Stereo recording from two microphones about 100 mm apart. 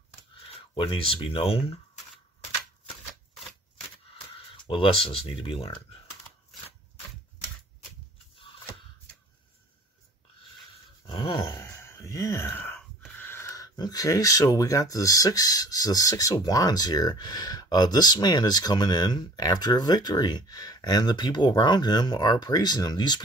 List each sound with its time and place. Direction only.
0.5 s speech: 65° left (ahead or behind)
4.6 s speech: 60° left (ahead or behind)
11.1 s a sound: 55° left (ahead or behind)
11.5 s speech: 25° left (ahead or behind); by 23.2 s 45° left (ahead or behind)